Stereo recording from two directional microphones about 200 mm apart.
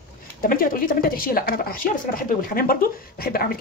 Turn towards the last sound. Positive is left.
turn(degrees=50)  # may be behind; listen again after turning